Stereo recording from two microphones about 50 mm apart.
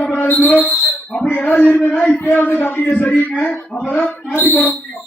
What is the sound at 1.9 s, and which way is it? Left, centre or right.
Speech, left.